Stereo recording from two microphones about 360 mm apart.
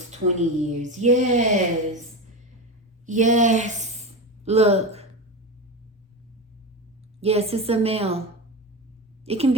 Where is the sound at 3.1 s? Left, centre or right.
Right.